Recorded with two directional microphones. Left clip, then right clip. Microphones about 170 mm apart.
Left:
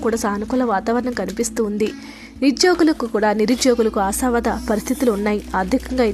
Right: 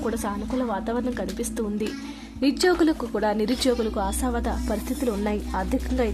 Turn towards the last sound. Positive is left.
turn(degrees=20)  # may be behind; listen again after turning